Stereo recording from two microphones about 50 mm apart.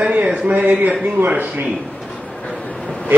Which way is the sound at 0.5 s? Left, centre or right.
Right.